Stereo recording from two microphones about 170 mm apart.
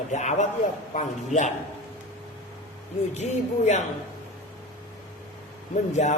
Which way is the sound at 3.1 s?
40° left (ahead or behind).